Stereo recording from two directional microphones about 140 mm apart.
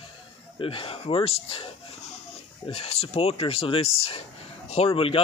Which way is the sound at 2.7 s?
50° left (ahead or behind).